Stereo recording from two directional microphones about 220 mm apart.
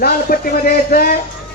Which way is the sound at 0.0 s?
40° left (ahead or behind).